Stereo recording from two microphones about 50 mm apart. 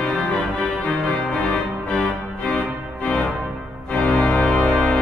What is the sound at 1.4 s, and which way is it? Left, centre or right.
Organ, left.